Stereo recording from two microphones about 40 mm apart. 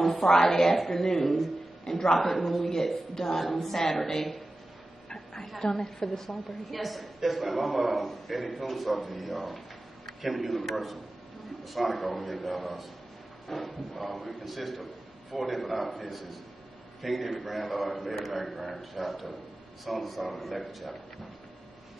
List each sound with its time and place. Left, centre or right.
0.1 s a woman's voice: centre
5.1 s a sound: centre
5.6 s a woman's voice: centre